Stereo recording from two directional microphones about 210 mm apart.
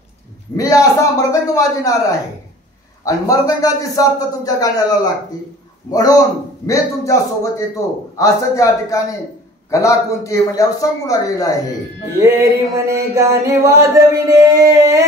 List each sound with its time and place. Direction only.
0.6 s a man's voice: 15° left (ahead or behind)
6.6 s a man's voice: 15° left (ahead or behind)
12.2 s a sound: 15° right (ahead or behind)